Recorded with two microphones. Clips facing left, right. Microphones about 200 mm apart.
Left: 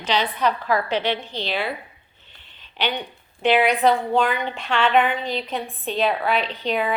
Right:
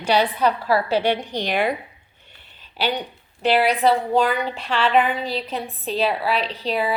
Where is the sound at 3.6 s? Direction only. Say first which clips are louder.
Right 1 dB; 5° right (ahead or behind).